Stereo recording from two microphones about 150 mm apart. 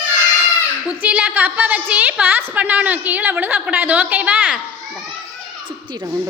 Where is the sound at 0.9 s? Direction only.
10° right (ahead or behind).